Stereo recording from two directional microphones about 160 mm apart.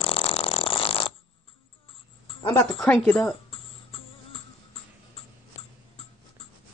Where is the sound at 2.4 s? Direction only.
20° left (ahead or behind).